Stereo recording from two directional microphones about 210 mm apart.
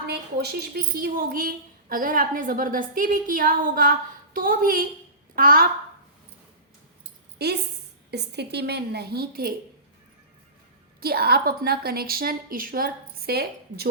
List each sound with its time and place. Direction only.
0.1 s a woman's voice: 50° right (ahead or behind)
7.4 s a woman's voice: 50° right (ahead or behind)
11.0 s a woman's voice: 45° right (ahead or behind)